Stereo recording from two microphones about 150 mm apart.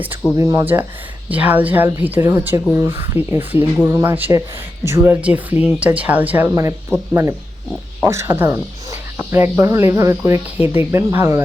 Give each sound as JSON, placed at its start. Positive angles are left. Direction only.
{"t": 0.3, "sound": "speech", "side_deg": -20}